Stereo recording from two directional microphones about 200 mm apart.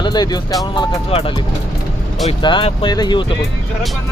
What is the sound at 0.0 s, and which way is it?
Speech, 20° left (ahead or behind).